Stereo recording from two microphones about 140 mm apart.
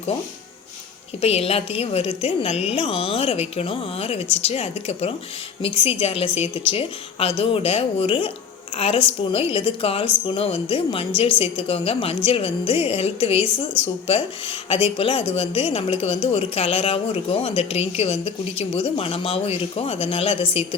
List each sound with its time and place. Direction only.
1.2 s a woman's voice: 45° left (ahead or behind)
14.9 s a woman's voice: 40° left (ahead or behind)